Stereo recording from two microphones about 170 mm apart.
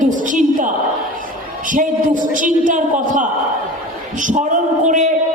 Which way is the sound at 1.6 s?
50° right (ahead or behind).